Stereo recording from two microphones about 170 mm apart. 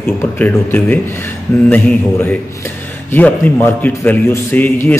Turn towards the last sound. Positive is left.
turn(degrees=10)  # may be behind; listen again after turning